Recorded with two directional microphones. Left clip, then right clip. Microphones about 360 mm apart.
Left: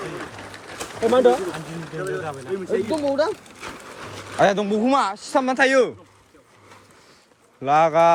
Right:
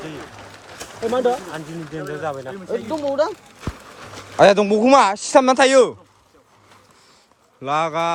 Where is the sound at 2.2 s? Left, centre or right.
Right.